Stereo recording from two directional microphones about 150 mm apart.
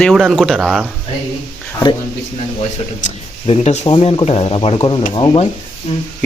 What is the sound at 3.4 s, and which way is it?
Speech, 45° left (ahead or behind).